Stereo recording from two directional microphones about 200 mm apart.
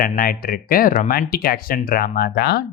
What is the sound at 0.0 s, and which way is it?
Speech, 45° left (ahead or behind).